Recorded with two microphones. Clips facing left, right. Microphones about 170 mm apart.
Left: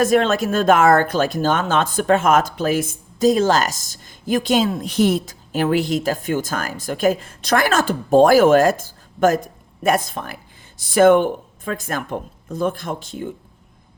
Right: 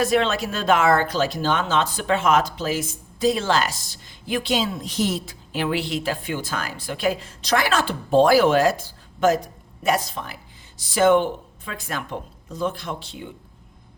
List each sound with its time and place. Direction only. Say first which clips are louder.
0.0 s speech: left 4 dB; 45° left (ahead or behind)